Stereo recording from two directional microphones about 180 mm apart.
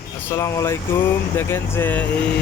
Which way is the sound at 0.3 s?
15° left (ahead or behind).